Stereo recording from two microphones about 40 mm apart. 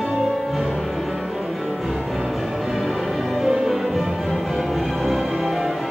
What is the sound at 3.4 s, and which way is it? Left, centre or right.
Music, centre.